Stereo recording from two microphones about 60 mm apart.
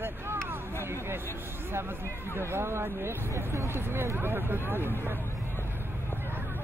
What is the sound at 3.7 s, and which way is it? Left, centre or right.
Speech, right.